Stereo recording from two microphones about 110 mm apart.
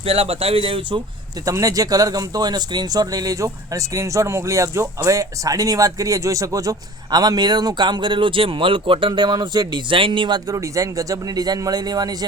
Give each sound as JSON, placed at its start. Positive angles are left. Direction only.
{"t": 0.0, "sound": "speech", "side_deg": -65}
{"t": 1.5, "sound": "speech", "side_deg": -30}
{"t": 10.5, "sound": "speech", "side_deg": -30}